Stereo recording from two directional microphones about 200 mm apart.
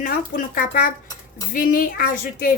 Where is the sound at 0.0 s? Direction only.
45° left (ahead or behind).